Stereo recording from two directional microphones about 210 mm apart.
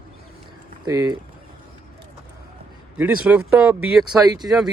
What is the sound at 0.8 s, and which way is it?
Speech, 15° right (ahead or behind).